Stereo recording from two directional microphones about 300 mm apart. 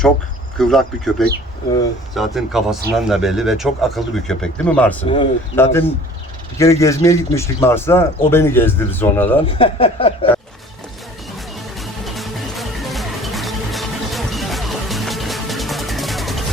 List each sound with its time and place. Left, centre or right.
0.6 s speech: centre
5.0 s speech: centre
9.6 s speech: centre
11.8 s music: centre